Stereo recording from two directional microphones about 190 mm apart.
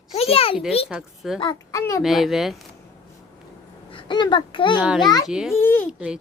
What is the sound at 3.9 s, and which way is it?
A child's voice, 25° left (ahead or behind).